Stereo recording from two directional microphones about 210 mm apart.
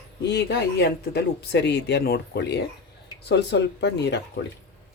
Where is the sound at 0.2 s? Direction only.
55° left (ahead or behind).